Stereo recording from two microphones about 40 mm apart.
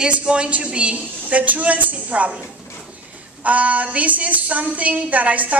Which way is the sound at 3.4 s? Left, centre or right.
Right.